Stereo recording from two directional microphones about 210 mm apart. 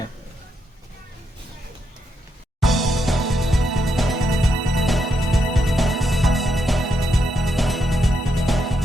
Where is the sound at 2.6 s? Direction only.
Centre (ahead or behind).